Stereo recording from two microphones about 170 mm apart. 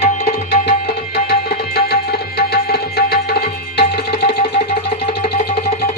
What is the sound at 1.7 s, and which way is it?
Tabla, 70° left (ahead or behind).